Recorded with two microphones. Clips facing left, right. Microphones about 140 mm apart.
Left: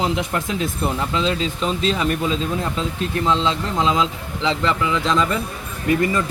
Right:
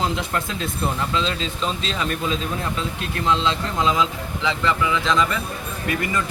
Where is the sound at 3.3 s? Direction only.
25° left (ahead or behind).